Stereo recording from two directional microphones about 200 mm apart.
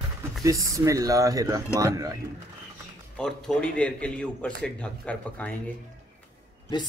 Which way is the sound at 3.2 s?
5° left (ahead or behind).